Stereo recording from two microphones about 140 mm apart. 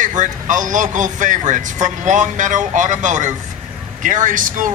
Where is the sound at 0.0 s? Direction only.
65° right (ahead or behind).